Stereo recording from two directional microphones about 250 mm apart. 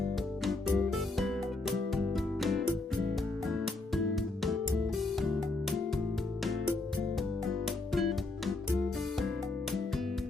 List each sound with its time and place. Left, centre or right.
0.4 s music: centre